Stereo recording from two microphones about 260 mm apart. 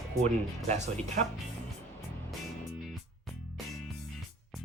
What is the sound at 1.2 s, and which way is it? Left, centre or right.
Speech, right.